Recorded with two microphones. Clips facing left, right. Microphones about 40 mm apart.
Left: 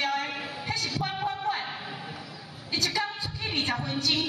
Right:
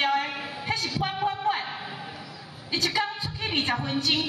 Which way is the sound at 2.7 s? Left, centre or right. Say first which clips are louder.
Right 2 dB; right.